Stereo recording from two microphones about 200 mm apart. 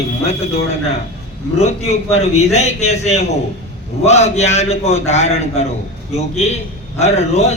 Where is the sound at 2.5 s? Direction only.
35° left (ahead or behind).